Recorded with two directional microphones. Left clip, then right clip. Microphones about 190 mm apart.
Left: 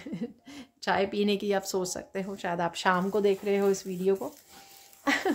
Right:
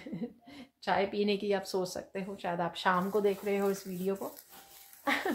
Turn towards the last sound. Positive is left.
turn(degrees=50)  # may be behind; listen again after turning